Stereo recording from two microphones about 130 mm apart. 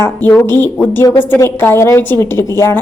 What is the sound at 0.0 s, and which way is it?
A woman's voice, 15° left (ahead or behind).